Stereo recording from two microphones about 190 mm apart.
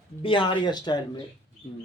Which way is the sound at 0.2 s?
25° left (ahead or behind).